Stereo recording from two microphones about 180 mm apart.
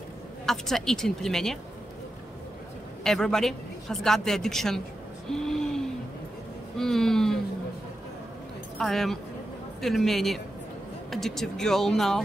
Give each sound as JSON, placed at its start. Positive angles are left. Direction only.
{"t": 0.5, "sound": "speech", "side_deg": 0}
{"t": 3.0, "sound": "speech", "side_deg": 5}
{"t": 5.3, "sound": "a sound", "side_deg": 5}
{"t": 6.8, "sound": "speech", "side_deg": 0}
{"t": 8.7, "sound": "speech", "side_deg": 0}